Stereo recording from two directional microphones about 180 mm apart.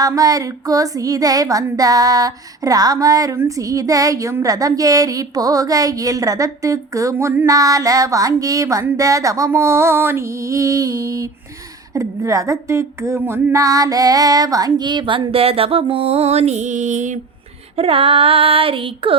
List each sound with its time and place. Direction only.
0.0 s speech: 20° right (ahead or behind); by 17.2 s 45° right (ahead or behind)
17.7 s female singing: 30° right (ahead or behind)